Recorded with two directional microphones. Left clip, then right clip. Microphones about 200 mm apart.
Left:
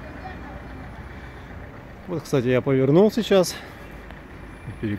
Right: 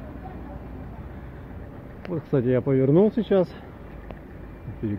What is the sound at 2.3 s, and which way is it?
Speech, 15° left (ahead or behind).